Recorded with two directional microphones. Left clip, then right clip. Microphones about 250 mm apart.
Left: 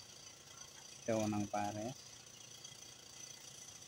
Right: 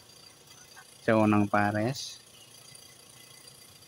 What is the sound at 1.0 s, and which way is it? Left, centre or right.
Speech, right.